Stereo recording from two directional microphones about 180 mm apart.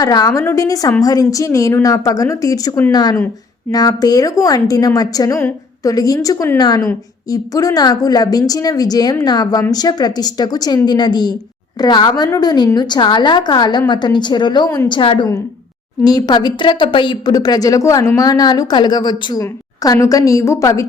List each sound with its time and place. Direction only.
0.0 s a woman's voice: 20° left (ahead or behind)